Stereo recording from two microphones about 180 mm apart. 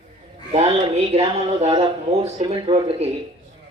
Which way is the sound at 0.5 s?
35° right (ahead or behind).